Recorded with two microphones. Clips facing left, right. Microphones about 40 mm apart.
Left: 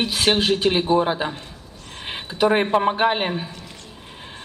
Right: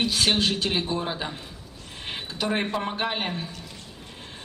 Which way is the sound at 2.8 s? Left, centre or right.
Left.